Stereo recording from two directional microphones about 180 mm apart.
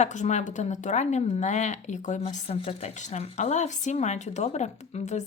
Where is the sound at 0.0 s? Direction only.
40° left (ahead or behind).